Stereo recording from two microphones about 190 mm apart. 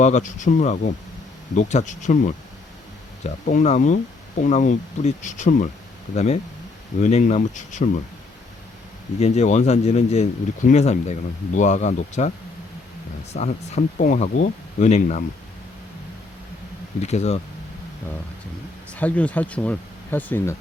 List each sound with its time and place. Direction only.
0.0 s speech: 40° left (ahead or behind)
9.1 s speech: 35° left (ahead or behind)
13.3 s speech: 35° left (ahead or behind)
17.0 s speech: 35° left (ahead or behind)
18.9 s speech: 5° left (ahead or behind)